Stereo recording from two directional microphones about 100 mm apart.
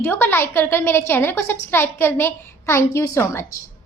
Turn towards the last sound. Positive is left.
turn(degrees=30)  # may be behind; listen again after turning